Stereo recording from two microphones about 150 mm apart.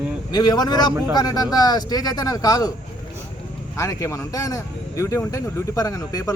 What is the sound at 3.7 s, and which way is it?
A man's voice, 20° left (ahead or behind).